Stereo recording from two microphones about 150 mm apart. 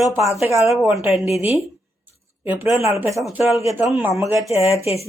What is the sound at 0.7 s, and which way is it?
Speech, centre (ahead or behind).